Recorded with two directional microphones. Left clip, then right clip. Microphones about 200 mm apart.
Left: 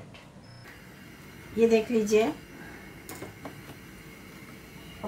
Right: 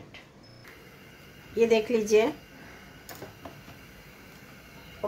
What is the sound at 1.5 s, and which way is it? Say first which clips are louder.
Speech: even; 45° right (ahead or behind).